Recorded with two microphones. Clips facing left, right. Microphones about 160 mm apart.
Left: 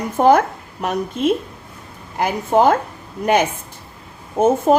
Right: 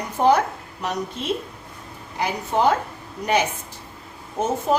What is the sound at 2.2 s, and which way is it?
Speech, 50° left (ahead or behind).